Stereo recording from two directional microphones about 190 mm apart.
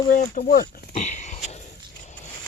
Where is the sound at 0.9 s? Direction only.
35° left (ahead or behind).